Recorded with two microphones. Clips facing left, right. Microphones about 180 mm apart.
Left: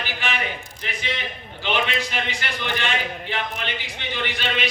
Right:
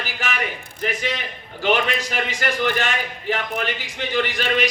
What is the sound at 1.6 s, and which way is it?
Speech, 40° right (ahead or behind).